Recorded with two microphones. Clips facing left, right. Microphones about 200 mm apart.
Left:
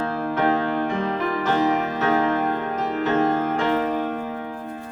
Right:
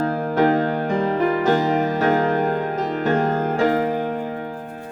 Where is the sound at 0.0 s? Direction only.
40° right (ahead or behind).